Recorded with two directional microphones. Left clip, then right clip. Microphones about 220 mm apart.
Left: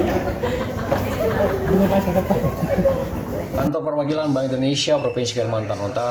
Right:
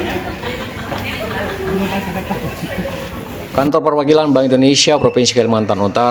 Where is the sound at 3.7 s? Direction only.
50° right (ahead or behind).